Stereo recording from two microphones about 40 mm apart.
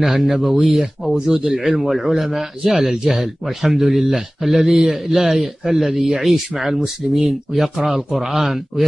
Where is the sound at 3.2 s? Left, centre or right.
Centre.